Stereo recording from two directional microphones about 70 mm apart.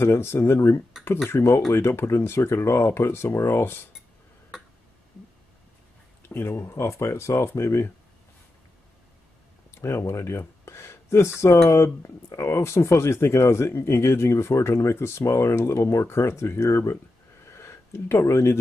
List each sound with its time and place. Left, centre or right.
0.0 s speech: left
6.2 s speech: left
9.8 s speech: left
16.9 s a sound: left
18.2 s speech: left